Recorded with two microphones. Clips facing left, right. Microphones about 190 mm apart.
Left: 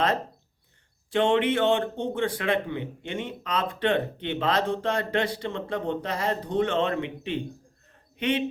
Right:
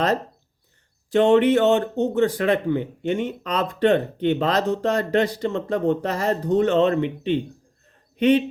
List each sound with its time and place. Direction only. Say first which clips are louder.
1.1 s speech: right 7 dB; 40° right (ahead or behind)